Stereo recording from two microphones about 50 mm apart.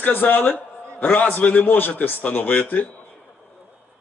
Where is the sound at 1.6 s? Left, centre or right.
Left.